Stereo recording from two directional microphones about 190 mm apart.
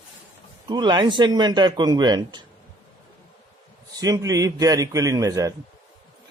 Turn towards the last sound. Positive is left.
turn(degrees=-15)  # may be behind; listen again after turning